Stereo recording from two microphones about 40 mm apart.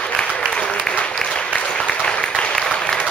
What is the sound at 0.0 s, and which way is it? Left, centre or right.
Applause, left.